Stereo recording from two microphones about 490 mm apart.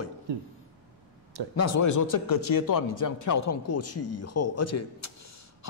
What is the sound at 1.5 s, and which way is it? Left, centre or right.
A man's voice, left.